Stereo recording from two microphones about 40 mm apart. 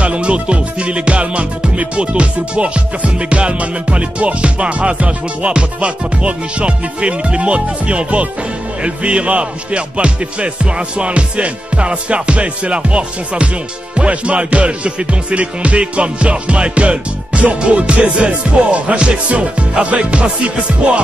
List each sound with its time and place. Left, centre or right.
0.0 s music: right